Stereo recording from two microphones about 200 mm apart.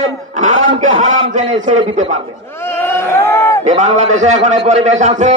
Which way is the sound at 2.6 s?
10° left (ahead or behind).